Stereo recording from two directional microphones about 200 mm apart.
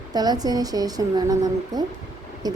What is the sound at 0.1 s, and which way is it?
Speech, 20° right (ahead or behind).